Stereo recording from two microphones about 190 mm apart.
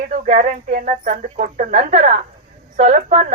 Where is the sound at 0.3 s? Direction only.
40° right (ahead or behind).